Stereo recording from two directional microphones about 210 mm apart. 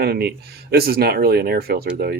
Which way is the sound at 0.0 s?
50° right (ahead or behind).